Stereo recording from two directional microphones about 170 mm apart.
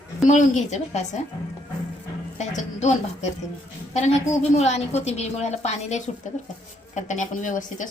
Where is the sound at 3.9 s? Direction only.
40° left (ahead or behind).